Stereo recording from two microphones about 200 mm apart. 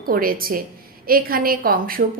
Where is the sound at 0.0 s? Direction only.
45° right (ahead or behind).